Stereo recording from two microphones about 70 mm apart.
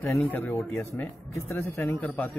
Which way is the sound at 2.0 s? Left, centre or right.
Left.